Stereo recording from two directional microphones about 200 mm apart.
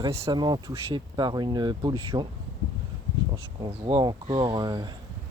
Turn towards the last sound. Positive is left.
turn(degrees=-20)  # may be behind; listen again after turning